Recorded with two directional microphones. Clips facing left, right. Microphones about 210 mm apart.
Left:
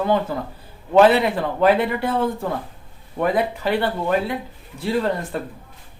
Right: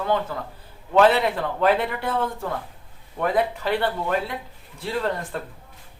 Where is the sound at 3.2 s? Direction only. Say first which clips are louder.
Left 2 dB; 5° left (ahead or behind).